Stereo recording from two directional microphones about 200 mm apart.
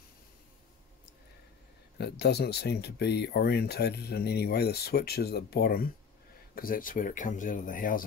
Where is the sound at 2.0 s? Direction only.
55° left (ahead or behind).